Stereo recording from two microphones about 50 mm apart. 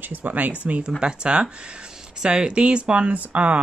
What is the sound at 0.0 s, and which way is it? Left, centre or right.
Speech, right.